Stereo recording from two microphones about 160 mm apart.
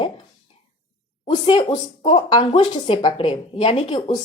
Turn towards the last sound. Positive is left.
turn(degrees=30)  # may be behind; listen again after turning